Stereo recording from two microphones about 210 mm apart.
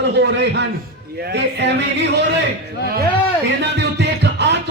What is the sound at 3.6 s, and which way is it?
Music, 55° right (ahead or behind).